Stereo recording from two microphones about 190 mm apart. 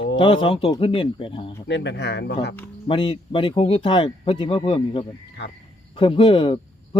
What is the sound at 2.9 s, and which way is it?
A man's voice, 30° left (ahead or behind).